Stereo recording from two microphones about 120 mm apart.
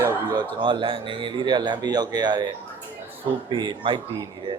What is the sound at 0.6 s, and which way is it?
Speech, 45° right (ahead or behind).